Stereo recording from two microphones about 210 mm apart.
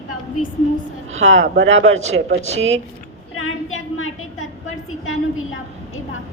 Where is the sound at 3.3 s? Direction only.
75° left (ahead or behind).